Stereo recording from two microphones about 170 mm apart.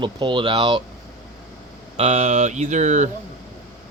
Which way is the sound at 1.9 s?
40° right (ahead or behind).